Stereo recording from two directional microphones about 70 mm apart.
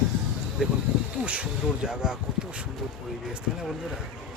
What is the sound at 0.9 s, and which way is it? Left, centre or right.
Insect, centre.